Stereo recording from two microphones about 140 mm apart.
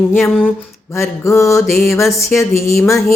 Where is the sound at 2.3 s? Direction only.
20° left (ahead or behind).